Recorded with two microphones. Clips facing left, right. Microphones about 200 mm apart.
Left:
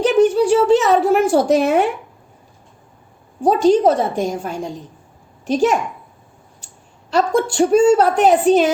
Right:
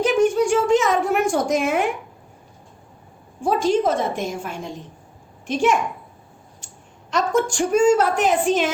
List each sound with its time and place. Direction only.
0.0 s a woman's voice: 35° left (ahead or behind)
3.4 s a woman's voice: 35° left (ahead or behind)
7.1 s a woman's voice: 35° left (ahead or behind)